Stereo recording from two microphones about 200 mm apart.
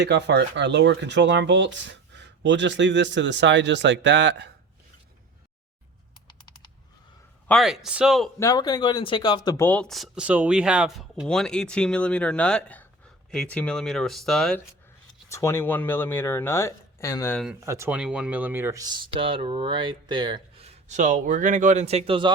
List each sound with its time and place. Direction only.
0.0 s speech: 60° right (ahead or behind)
7.4 s speech: centre (ahead or behind)
8.4 s speech: 20° left (ahead or behind); by 14.6 s centre (ahead or behind)
15.3 s speech: 15° left (ahead or behind)
17.6 s speech: 15° right (ahead or behind)
20.8 s speech: 35° right (ahead or behind)